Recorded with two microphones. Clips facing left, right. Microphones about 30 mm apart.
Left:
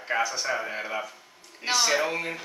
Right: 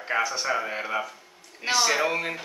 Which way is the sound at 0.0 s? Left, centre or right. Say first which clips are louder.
Right 1 dB; centre.